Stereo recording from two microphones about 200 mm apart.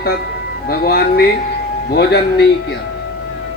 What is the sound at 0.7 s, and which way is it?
Speech, 50° left (ahead or behind).